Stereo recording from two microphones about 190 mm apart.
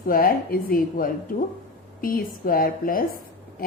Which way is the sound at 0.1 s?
50° left (ahead or behind).